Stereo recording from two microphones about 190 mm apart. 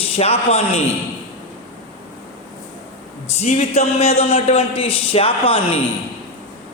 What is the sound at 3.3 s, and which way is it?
A man's voice, 40° left (ahead or behind).